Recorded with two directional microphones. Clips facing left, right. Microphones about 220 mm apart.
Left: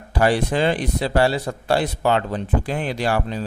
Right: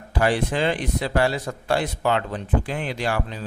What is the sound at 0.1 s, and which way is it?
A man's voice, 35° left (ahead or behind).